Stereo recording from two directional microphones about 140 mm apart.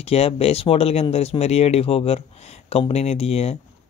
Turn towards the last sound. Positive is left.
turn(degrees=45)  # may be behind; listen again after turning